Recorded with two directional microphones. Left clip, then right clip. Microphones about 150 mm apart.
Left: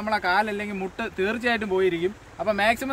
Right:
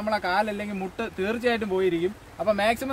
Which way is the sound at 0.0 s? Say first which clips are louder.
Left 2 dB; 45° right (ahead or behind).